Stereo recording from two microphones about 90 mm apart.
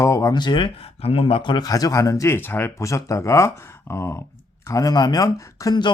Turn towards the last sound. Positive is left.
turn(degrees=45)  # may be behind; listen again after turning